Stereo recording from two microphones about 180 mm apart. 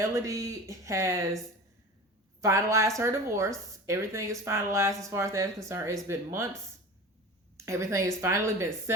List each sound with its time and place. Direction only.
0.0 s speech: 15° right (ahead or behind)
2.4 s speech: 15° right (ahead or behind)
7.5 s speech: 15° right (ahead or behind)